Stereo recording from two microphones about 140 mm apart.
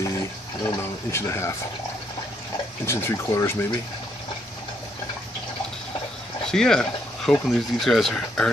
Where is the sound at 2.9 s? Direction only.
20° left (ahead or behind).